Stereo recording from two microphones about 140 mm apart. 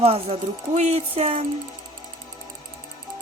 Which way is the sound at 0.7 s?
55° right (ahead or behind).